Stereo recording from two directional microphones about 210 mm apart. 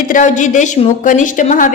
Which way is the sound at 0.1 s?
35° left (ahead or behind).